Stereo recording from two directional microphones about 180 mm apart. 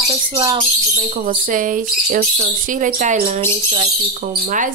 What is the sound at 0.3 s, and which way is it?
Speech, 30° right (ahead or behind).